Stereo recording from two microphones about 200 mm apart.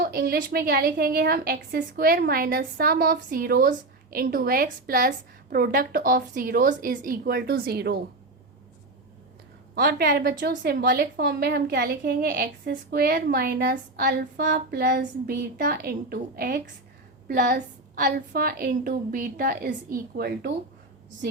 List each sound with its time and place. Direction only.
0.0 s a woman's voice: 50° right (ahead or behind)
9.7 s a woman's voice: 50° right (ahead or behind)